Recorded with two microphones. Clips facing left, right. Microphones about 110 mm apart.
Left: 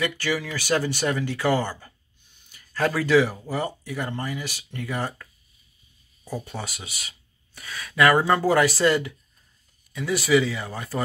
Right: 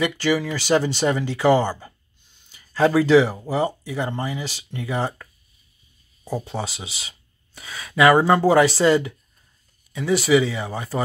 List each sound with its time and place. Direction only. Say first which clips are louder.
0.0 s speech: right 5 dB; 20° right (ahead or behind)